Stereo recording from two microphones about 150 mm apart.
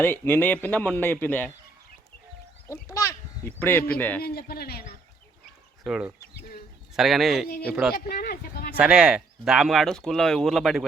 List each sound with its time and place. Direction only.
0.0 s speech: 15° left (ahead or behind)
2.6 s speech: 20° left (ahead or behind)
4.2 s speech: 90° left
5.8 s speech: 5° right (ahead or behind)
7.4 s speech: 90° left
7.7 s speech: 5° right (ahead or behind)
7.9 s speech: 85° left
8.8 s speech: 5° right (ahead or behind)